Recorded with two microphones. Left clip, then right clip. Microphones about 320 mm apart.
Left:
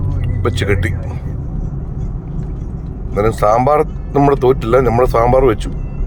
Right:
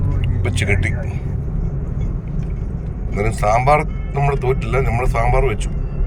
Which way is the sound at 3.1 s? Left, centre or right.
Centre.